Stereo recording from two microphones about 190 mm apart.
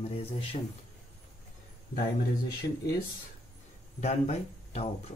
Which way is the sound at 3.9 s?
35° left (ahead or behind).